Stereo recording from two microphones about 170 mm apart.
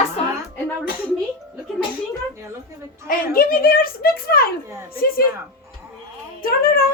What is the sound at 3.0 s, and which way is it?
Speech, 60° left (ahead or behind).